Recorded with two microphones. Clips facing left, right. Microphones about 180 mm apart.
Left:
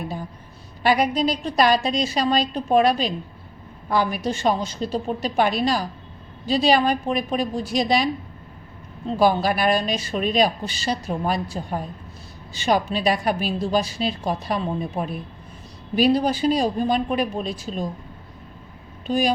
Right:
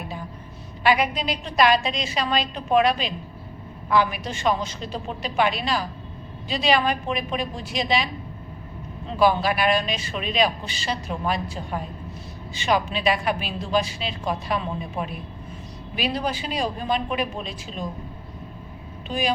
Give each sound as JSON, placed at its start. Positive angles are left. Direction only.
{"t": 0.8, "sound": "speech", "side_deg": 40}
{"t": 19.0, "sound": "speech", "side_deg": 40}